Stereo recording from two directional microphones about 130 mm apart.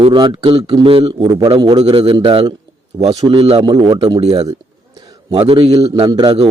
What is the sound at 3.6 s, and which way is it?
Speech, 30° right (ahead or behind).